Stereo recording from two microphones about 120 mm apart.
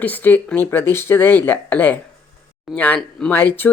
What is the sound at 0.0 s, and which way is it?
Speech, 15° left (ahead or behind).